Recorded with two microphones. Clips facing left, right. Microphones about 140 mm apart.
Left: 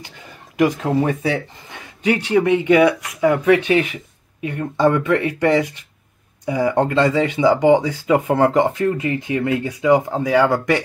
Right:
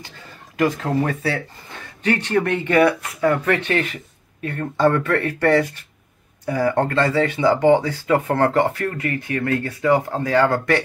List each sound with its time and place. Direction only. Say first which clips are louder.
0.0 s speech: left 1 dB; 15° left (ahead or behind)